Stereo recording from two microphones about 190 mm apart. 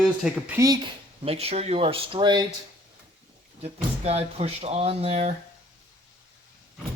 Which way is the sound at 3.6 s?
30° right (ahead or behind).